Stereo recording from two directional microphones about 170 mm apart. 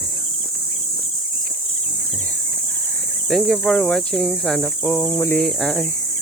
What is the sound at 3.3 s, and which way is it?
Speech, centre (ahead or behind).